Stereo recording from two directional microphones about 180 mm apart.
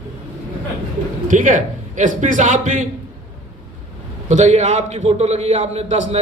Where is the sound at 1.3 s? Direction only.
45° right (ahead or behind).